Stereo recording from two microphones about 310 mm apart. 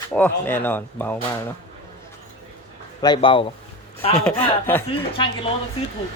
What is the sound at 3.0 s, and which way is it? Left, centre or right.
Speech, centre.